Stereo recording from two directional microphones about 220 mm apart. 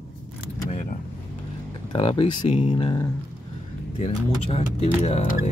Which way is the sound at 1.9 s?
25° left (ahead or behind).